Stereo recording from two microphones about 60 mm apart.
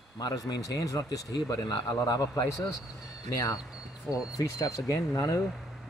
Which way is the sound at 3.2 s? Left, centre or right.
Left.